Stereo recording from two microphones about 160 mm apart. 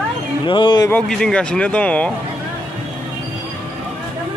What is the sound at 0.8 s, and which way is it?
Speech, 5° left (ahead or behind).